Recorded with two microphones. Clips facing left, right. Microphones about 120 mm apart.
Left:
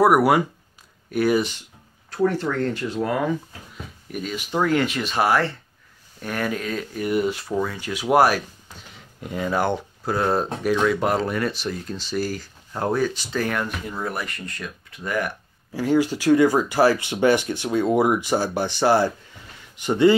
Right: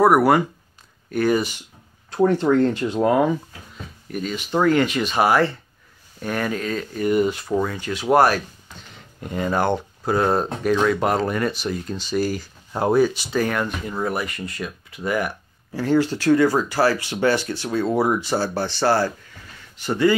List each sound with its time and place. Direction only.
0.0 s speech: 10° left (ahead or behind)
2.0 s speech: 20° right (ahead or behind)
4.1 s speech: 5° left (ahead or behind)
15.7 s speech: 10° left (ahead or behind)